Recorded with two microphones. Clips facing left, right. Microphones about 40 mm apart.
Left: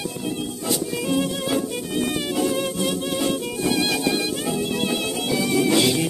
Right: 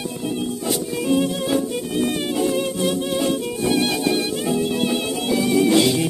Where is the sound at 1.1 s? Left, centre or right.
Centre.